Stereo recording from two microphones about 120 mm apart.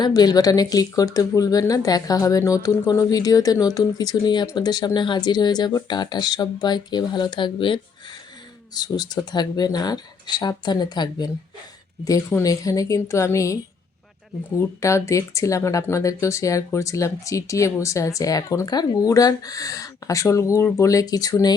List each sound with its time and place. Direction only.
0.0 s speech: 35° left (ahead or behind)
12.4 s speech: 30° left (ahead or behind)
14.8 s speech: 25° left (ahead or behind)